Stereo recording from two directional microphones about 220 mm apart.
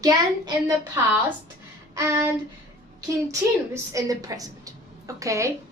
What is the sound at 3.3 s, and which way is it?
A woman's voice, 15° right (ahead or behind).